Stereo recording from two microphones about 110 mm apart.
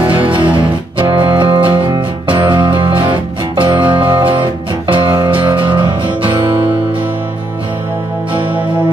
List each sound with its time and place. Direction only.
0.1 s music: 50° right (ahead or behind)